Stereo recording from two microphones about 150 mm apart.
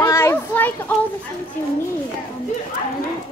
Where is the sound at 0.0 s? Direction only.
20° left (ahead or behind).